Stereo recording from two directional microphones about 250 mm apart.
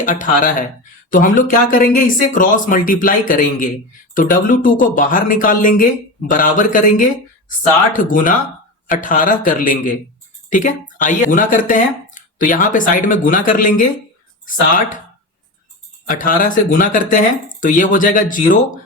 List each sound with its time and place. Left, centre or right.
0.0 s speech: left
16.0 s speech: left